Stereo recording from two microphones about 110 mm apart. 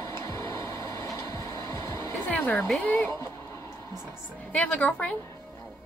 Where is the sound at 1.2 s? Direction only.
30° left (ahead or behind).